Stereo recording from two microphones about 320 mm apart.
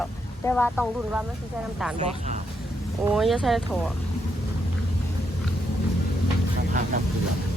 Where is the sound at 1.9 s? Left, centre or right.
Right.